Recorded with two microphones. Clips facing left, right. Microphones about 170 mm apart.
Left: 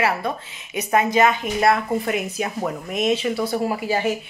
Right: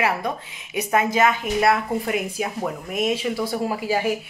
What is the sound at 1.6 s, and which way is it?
A woman's voice, 5° right (ahead or behind).